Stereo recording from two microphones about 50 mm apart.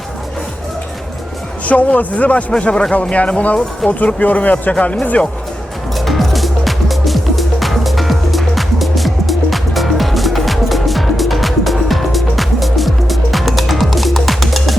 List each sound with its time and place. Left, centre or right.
1.6 s speech: left
2.5 s speech: centre
6.1 s music: centre